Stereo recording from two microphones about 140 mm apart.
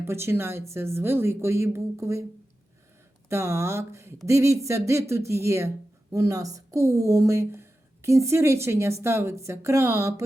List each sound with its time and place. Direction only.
0.0 s speech: 20° right (ahead or behind)
3.2 s speech: 20° right (ahead or behind)